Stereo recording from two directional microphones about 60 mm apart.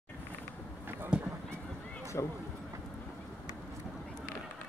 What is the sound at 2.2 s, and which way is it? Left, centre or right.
Speech, left.